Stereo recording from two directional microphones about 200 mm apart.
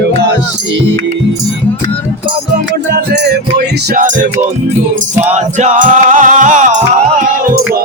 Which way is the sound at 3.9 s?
40° right (ahead or behind).